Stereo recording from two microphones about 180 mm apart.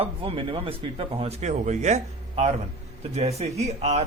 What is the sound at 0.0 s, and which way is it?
A man's voice, 30° right (ahead or behind).